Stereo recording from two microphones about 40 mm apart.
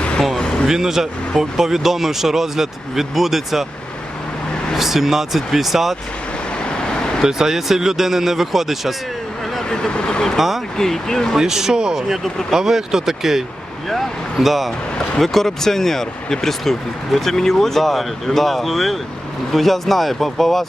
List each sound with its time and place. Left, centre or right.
0.3 s a sound: centre
0.7 s speech: centre
4.7 s speech: centre
6.7 s vehicle: centre
7.3 s speech: centre
9.6 s speech: centre
10.3 s speech: centre
10.8 s speech: centre
11.3 s speech: centre
13.9 s speech: centre